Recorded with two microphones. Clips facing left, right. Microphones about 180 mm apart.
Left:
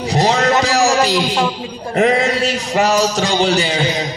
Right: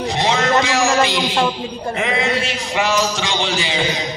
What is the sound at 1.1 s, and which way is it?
Speech, centre (ahead or behind).